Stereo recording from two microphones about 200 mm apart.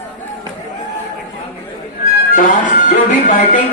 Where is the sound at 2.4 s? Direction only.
40° left (ahead or behind).